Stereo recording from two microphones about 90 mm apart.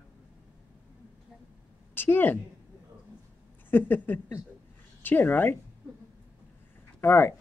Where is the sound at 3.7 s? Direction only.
20° left (ahead or behind).